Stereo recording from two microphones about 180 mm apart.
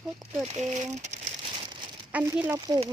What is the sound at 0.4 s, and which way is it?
Crumpling, 40° right (ahead or behind).